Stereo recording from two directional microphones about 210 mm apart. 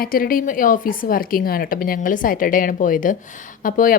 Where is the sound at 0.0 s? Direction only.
45° left (ahead or behind).